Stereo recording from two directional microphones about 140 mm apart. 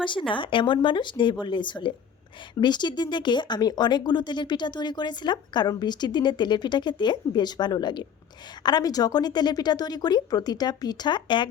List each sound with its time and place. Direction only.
0.0 s speech: 35° left (ahead or behind)